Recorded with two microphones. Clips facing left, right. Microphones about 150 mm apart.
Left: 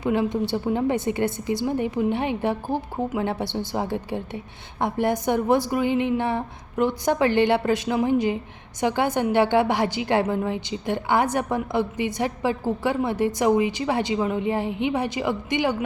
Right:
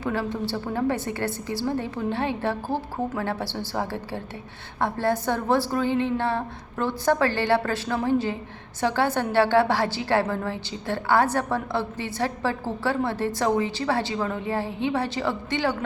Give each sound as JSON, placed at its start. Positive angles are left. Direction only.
{"t": 0.0, "sound": "a woman's voice", "side_deg": 20}